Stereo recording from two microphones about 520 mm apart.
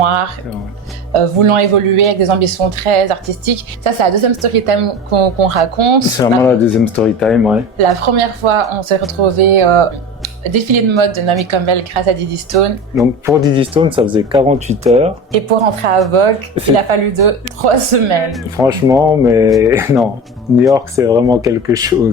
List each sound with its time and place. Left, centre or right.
0.0 s a woman's voice: right
6.1 s speech: centre
7.8 s a woman's voice: right
13.0 s speech: centre
15.3 s a woman's voice: right
16.7 s a woman's voice: right
18.3 s speech: centre